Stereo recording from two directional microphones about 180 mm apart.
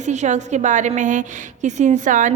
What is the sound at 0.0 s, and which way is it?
A woman's voice, 40° right (ahead or behind).